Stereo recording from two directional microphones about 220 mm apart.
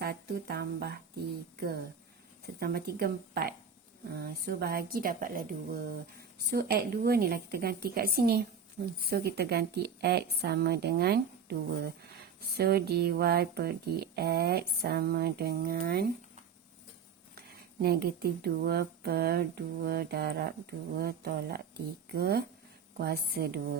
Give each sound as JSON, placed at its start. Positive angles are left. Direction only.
{"t": 0.0, "sound": "a sound", "side_deg": -45}
{"t": 1.5, "sound": "speech", "side_deg": -45}
{"t": 17.3, "sound": "speech", "side_deg": -45}